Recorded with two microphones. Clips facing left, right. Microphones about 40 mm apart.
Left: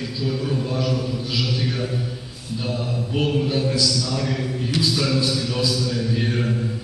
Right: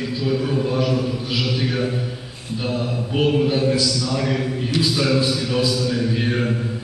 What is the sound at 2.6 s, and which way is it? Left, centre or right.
A man's voice, centre.